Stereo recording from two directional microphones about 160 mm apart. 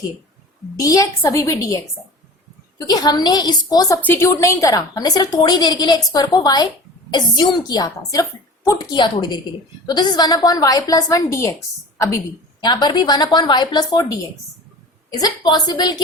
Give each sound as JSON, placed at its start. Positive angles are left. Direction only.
{"t": 0.8, "sound": "a woman's voice", "side_deg": 20}
{"t": 2.8, "sound": "a woman's voice", "side_deg": 25}
{"t": 12.6, "sound": "a woman's voice", "side_deg": 25}
{"t": 15.2, "sound": "a woman's voice", "side_deg": 25}